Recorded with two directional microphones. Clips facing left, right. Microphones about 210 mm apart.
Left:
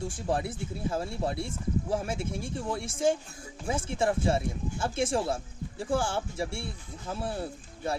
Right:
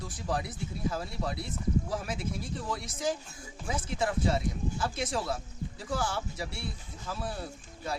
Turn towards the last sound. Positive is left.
turn(degrees=25)  # may be behind; listen again after turning